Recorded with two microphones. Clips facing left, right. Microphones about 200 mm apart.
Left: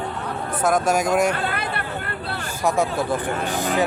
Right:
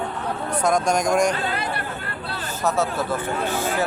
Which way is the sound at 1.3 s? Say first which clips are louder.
Even; 55° left (ahead or behind).